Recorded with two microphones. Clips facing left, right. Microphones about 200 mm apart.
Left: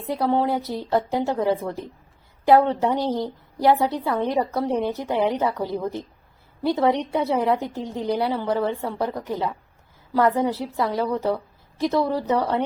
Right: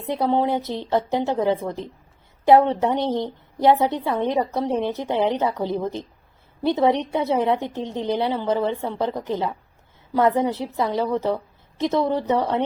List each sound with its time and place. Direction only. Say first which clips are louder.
0.0 s a woman's voice: right 1 dB; 20° right (ahead or behind)